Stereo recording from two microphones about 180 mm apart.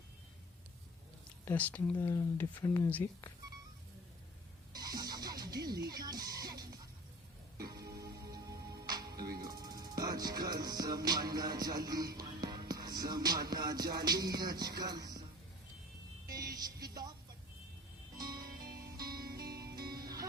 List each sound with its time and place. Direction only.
1.5 s speech: 10° left (ahead or behind)
4.7 s music: 20° right (ahead or behind)
16.3 s music: 20° right (ahead or behind)
18.2 s music: 20° right (ahead or behind)
18.4 s music: 55° right (ahead or behind)
18.9 s music: 20° right (ahead or behind)
19.4 s music: 60° right (ahead or behind)
20.0 s music: 20° right (ahead or behind)